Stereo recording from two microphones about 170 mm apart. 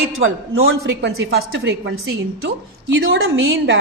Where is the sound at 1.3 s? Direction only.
90° right.